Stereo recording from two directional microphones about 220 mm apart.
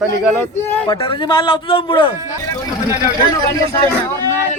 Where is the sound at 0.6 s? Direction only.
10° left (ahead or behind).